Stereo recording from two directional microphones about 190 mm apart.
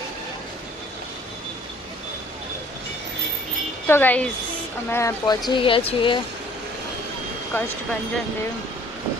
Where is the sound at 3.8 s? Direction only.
10° left (ahead or behind); by 6.2 s 25° left (ahead or behind).